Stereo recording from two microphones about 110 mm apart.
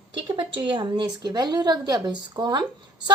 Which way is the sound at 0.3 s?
45° right (ahead or behind).